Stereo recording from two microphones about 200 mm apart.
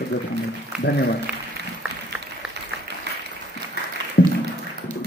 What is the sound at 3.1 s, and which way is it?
Applause, 55° right (ahead or behind).